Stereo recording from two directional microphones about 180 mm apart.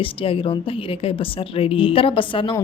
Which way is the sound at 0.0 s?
30° left (ahead or behind).